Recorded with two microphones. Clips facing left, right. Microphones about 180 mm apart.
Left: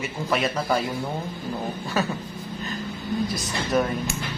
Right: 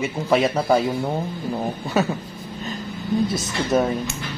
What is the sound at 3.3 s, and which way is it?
Speech, 25° right (ahead or behind).